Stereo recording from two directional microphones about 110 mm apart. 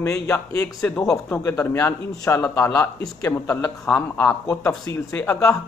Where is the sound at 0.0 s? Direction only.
25° left (ahead or behind).